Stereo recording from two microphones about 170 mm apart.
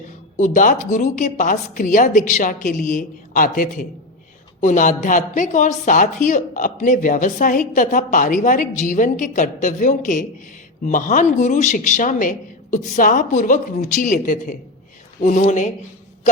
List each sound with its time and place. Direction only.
0.3 s a woman's voice: 45° left (ahead or behind)